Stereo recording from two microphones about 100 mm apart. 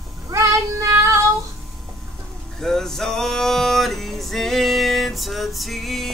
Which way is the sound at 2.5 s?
5° left (ahead or behind).